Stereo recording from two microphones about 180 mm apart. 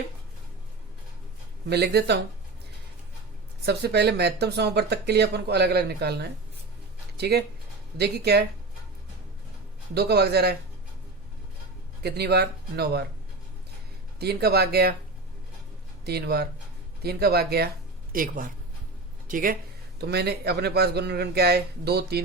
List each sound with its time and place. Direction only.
1.7 s speech: 65° right (ahead or behind)
3.7 s speech: 65° right (ahead or behind)
9.9 s speech: 65° right (ahead or behind)
12.0 s speech: 65° right (ahead or behind)
14.2 s speech: 60° right (ahead or behind)
16.0 s speech: 65° right (ahead or behind)
18.1 s speech: 50° right (ahead or behind)
20.0 s speech: 65° right (ahead or behind)